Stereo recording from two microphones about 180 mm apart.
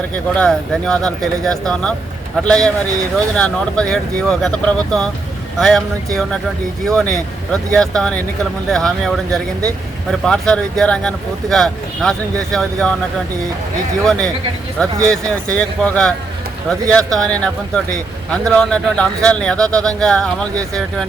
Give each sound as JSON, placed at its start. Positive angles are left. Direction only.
{"t": 0.3, "sound": "speech", "side_deg": 5}
{"t": 14.0, "sound": "speech", "side_deg": 5}